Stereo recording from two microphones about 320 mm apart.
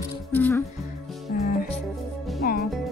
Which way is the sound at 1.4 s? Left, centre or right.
Left.